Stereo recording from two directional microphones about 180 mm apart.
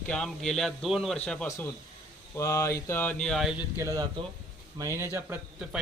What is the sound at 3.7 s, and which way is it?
A man's voice, 20° right (ahead or behind).